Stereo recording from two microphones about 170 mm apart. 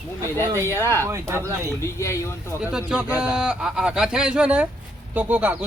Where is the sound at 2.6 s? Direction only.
5° right (ahead or behind).